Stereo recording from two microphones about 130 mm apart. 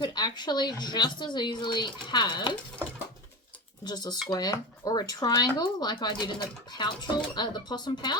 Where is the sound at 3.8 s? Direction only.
30° left (ahead or behind).